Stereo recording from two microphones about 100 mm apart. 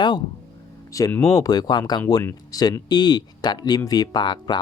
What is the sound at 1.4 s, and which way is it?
Speech, 40° left (ahead or behind).